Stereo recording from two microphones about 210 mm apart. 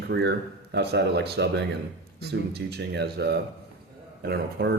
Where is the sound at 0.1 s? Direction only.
55° right (ahead or behind).